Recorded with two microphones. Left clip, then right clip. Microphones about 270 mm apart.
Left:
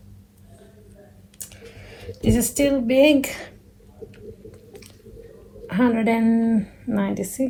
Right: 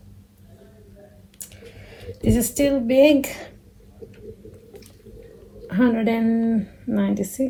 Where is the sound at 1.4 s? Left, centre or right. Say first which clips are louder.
Left 1 dB; centre.